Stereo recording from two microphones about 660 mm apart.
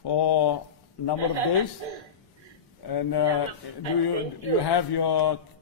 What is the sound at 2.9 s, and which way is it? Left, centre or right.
Speech, left.